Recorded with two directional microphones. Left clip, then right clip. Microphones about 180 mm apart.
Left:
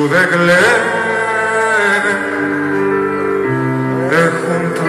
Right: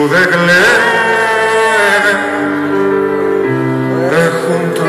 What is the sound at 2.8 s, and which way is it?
Music, 40° right (ahead or behind).